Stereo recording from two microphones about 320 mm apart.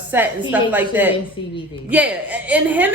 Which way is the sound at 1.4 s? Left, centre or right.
Centre.